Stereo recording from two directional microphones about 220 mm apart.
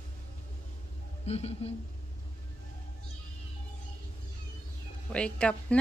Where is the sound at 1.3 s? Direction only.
30° left (ahead or behind).